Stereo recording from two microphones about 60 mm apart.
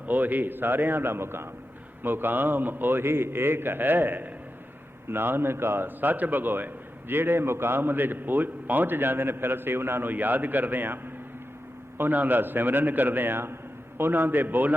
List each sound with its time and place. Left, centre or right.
0.0 s a man's voice: right